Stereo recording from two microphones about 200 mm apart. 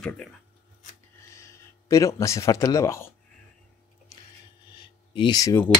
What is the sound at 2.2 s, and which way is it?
Speech, 15° left (ahead or behind).